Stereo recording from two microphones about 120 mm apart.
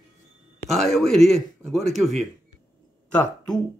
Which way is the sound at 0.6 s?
Centre (ahead or behind).